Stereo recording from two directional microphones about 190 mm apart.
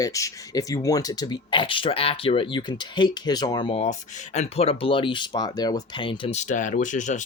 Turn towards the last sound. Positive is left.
turn(degrees=40)  # may be behind; listen again after turning